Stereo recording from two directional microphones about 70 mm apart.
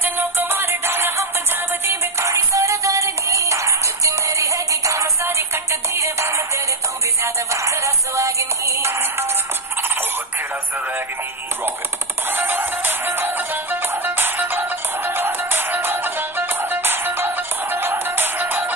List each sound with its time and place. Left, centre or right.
0.0 s music: right
2.2 s music: right
12.3 s music: right